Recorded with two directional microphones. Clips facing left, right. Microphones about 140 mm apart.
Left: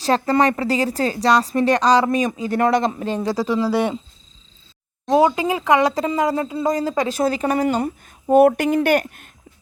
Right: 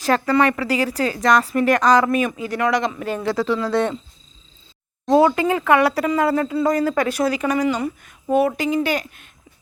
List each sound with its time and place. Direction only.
0.0 s a woman's voice: 35° left (ahead or behind)
3.2 s speech: 15° left (ahead or behind)
5.0 s speech: 15° left (ahead or behind)
7.3 s a woman's voice: 35° left (ahead or behind)
8.4 s speech: 60° left (ahead or behind)